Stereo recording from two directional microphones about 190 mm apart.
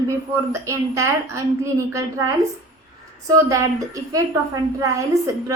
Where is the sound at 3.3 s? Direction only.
15° right (ahead or behind).